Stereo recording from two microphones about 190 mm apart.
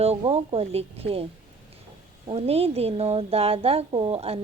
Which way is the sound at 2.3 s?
30° right (ahead or behind).